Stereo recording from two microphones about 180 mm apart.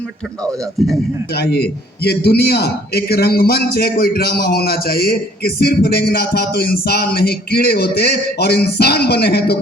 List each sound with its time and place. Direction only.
0.8 s a man's voice: centre (ahead or behind)
1.4 s a man's voice: 60° left (ahead or behind)